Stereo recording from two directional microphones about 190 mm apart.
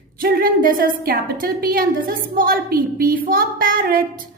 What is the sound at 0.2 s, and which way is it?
A woman's voice, 50° right (ahead or behind).